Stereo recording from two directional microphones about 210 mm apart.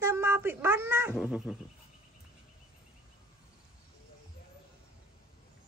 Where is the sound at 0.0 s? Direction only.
10° right (ahead or behind).